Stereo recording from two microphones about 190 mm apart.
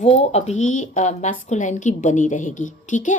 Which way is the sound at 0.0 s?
35° left (ahead or behind).